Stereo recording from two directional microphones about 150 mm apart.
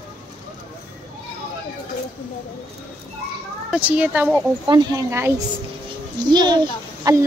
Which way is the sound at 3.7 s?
10° right (ahead or behind).